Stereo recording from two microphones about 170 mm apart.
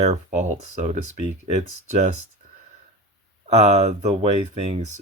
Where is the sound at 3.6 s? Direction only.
40° right (ahead or behind).